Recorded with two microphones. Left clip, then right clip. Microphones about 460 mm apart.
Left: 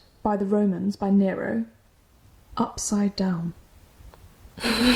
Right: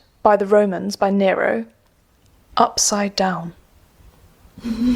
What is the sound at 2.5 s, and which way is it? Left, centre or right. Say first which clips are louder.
Speech: right 12 dB; right.